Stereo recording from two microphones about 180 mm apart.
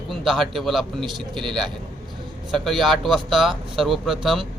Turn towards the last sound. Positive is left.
turn(degrees=0)  # may be behind; listen again after turning